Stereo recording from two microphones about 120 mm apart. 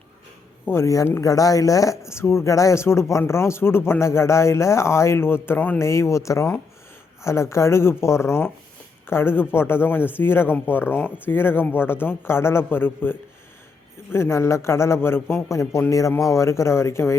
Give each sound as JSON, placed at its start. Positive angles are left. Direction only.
{"t": 0.6, "sound": "speech", "side_deg": 20}